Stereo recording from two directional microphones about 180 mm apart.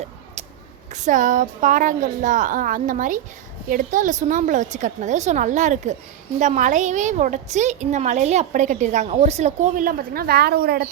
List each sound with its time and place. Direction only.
0.9 s a woman's voice: 45° right (ahead or behind); by 10.8 s 60° right (ahead or behind)